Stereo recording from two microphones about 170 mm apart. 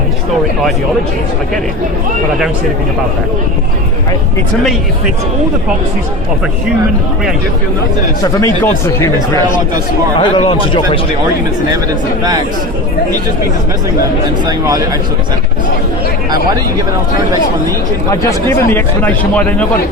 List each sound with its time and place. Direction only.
8.2 s speech: 20° left (ahead or behind)
10.2 s speech: 30° left (ahead or behind)
14.4 s speech: 20° right (ahead or behind)
18.1 s speech: 20° left (ahead or behind)